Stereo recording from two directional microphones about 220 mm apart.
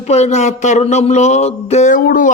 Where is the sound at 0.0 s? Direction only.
30° left (ahead or behind).